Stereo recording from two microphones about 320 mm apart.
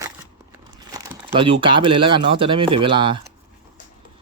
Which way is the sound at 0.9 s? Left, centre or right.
Centre.